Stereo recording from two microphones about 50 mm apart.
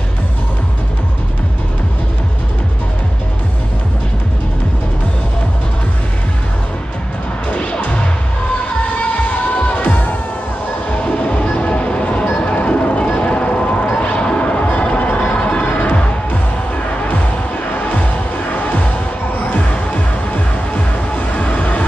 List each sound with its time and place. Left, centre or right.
9.0 s music: left
12.4 s a sound: left
14.8 s music: left
18.5 s music: left
19.5 s music: left